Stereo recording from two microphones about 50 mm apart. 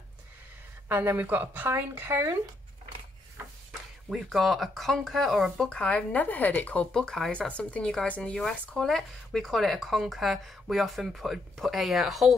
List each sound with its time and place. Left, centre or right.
0.8 s speech: right
4.1 s speech: centre
5.6 s speech: left
6.9 s speech: centre
8.2 s speech: centre